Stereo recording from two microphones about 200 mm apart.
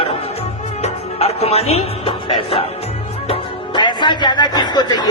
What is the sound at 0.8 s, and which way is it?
Music, 30° left (ahead or behind).